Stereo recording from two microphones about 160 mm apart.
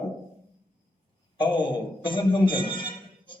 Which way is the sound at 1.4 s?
30° left (ahead or behind).